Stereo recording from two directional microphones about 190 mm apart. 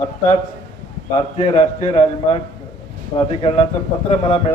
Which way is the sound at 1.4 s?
35° left (ahead or behind).